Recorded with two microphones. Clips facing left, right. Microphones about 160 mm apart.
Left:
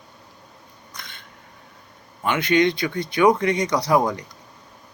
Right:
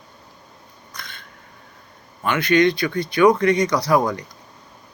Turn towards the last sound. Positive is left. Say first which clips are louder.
# right 1 dB
turn(degrees=20)  # may be behind; listen again after turning